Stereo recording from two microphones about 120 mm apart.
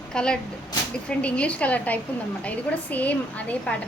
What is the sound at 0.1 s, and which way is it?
A woman's voice, 5° left (ahead or behind).